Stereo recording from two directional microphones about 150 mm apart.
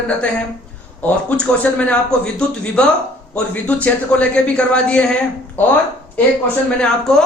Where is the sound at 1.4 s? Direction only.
5° left (ahead or behind).